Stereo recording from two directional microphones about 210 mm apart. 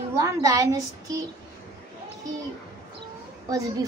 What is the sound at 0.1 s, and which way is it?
A woman's voice, 15° right (ahead or behind).